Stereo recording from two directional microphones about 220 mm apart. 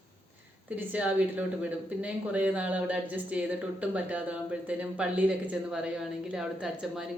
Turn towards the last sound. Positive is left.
turn(degrees=-5)  # may be behind; listen again after turning